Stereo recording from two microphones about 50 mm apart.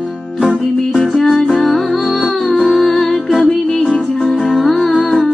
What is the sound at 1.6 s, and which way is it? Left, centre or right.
Music, centre.